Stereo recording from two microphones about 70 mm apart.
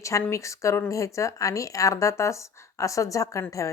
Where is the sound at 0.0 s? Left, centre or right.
Left.